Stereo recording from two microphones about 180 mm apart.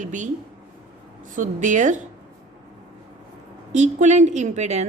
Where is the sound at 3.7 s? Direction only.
40° right (ahead or behind).